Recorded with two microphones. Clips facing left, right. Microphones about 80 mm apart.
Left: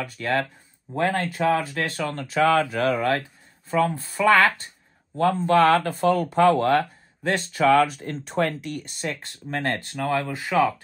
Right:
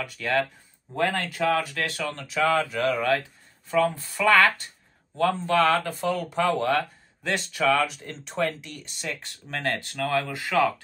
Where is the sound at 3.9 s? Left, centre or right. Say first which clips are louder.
Left 4 dB; left.